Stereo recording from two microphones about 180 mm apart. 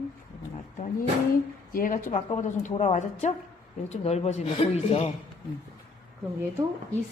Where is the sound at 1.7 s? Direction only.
50° left (ahead or behind); by 5.1 s 35° left (ahead or behind).